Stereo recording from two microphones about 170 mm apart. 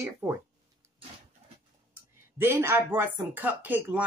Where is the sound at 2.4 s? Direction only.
15° right (ahead or behind).